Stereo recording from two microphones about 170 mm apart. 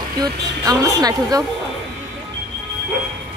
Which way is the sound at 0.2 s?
20° right (ahead or behind).